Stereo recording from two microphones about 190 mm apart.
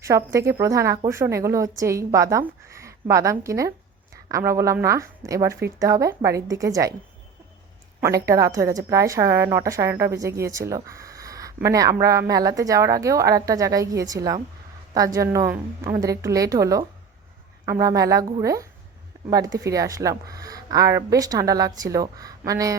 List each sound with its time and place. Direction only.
0.1 s a woman's voice: 15° right (ahead or behind)
8.0 s a woman's voice: 15° right (ahead or behind)